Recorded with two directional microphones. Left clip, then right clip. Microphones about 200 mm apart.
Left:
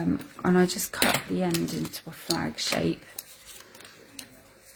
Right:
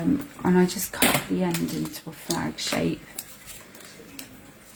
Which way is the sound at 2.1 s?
50° left (ahead or behind).